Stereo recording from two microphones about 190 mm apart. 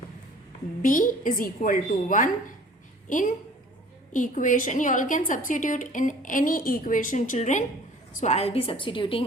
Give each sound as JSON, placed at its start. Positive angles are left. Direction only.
{"t": 0.8, "sound": "a woman's voice", "side_deg": 45}